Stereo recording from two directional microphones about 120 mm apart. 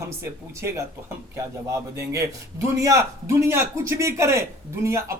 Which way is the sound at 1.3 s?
25° right (ahead or behind).